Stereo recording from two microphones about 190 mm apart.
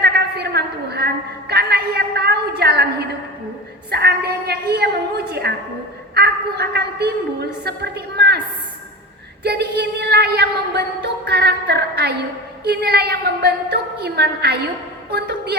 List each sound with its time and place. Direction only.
0.0 s a sound: 60° right (ahead or behind)
3.9 s a woman's voice: 55° right (ahead or behind)
9.4 s a woman's voice: 60° right (ahead or behind)